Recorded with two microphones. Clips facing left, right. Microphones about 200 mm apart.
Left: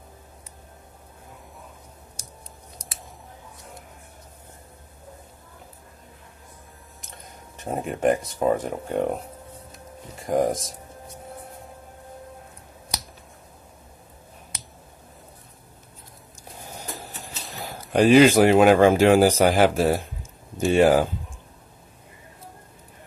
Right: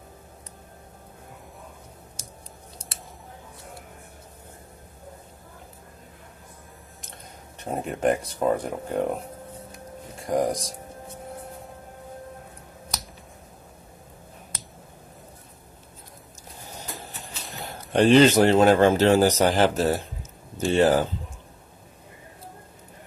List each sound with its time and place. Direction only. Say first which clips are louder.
2.8 s scissors: even; 35° left (ahead or behind)
7.6 s speech: left 2 dB; centre (ahead or behind)
10.2 s speech: left 2 dB; centre (ahead or behind)
16.9 s speech: left 1 dB; centre (ahead or behind)